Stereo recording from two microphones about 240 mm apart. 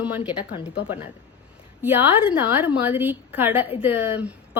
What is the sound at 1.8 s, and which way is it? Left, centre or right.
Speech, centre.